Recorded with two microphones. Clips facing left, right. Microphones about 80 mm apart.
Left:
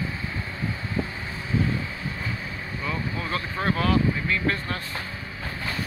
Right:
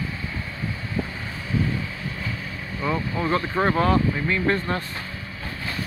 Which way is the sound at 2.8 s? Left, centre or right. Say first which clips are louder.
Right 6 dB; right.